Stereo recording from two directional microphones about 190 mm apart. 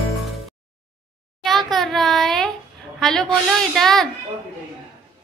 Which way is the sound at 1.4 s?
Centre (ahead or behind).